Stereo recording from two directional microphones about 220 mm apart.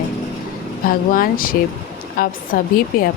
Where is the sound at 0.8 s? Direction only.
40° left (ahead or behind).